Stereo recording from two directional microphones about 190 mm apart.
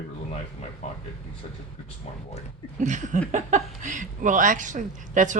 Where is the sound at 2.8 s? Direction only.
40° right (ahead or behind).